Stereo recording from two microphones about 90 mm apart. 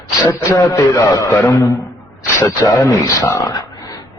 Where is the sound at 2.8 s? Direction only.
40° left (ahead or behind).